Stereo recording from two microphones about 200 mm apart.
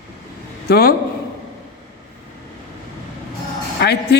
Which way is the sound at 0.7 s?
50° left (ahead or behind).